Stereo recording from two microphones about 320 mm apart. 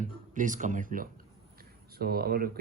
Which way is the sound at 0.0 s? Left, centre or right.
Right.